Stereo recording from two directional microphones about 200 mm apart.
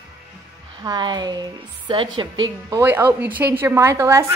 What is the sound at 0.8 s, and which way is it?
A woman's voice, 20° right (ahead or behind).